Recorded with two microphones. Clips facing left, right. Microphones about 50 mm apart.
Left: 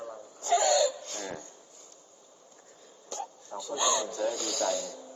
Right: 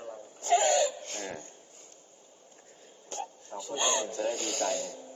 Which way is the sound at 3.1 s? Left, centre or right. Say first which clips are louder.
Even; right.